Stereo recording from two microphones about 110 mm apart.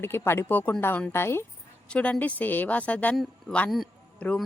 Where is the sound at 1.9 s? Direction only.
10° left (ahead or behind).